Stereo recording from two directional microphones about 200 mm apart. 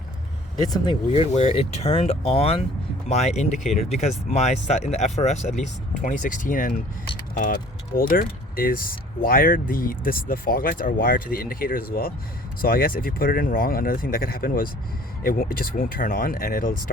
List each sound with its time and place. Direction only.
0.7 s speech: 25° left (ahead or behind); by 16.8 s 45° left (ahead or behind)